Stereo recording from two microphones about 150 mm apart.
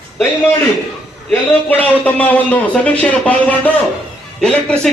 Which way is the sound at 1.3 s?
10° left (ahead or behind).